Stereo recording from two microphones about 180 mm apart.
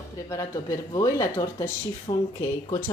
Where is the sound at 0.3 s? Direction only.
15° left (ahead or behind).